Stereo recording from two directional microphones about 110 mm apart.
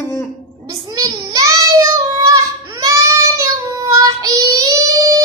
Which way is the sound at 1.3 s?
30° right (ahead or behind).